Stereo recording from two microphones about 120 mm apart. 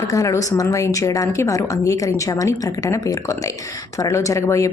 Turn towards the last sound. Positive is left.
turn(degrees=25)  # may be behind; listen again after turning